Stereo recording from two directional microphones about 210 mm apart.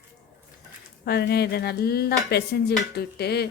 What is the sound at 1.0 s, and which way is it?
Dishes, 50° left (ahead or behind).